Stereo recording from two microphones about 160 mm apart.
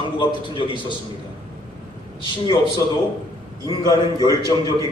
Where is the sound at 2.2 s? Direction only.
30° left (ahead or behind).